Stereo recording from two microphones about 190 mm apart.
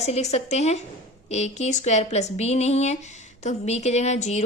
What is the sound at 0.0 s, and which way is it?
A woman's voice, 35° left (ahead or behind).